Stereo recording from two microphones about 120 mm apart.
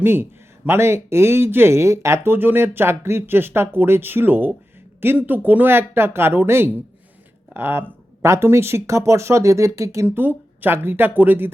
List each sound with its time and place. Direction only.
0.0 s speech: 20° right (ahead or behind)
10.1 s speech: 15° right (ahead or behind)